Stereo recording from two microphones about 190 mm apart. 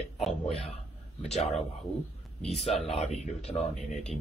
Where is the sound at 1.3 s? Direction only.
35° left (ahead or behind).